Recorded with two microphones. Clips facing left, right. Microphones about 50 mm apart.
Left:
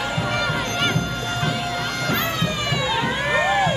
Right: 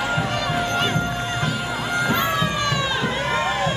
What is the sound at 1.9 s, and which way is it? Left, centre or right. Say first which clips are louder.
Music: right 6 dB; centre.